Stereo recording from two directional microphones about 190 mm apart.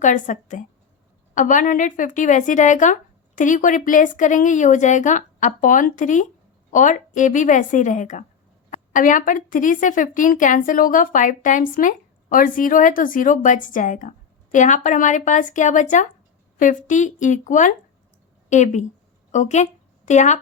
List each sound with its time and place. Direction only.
0.0 s a woman's voice: 40° left (ahead or behind)